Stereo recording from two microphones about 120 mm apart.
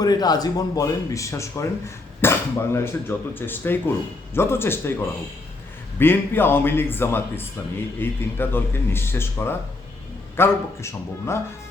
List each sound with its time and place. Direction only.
0.0 s speech: 35° left (ahead or behind)
6.0 s speech: 20° left (ahead or behind)